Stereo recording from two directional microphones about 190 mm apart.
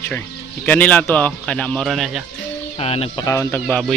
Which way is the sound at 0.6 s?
10° left (ahead or behind).